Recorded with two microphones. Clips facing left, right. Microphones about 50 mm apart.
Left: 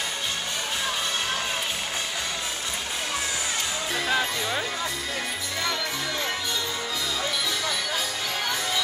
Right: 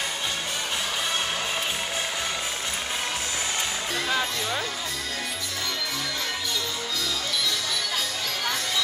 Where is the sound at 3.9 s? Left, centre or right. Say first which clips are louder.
Left 2 dB; centre.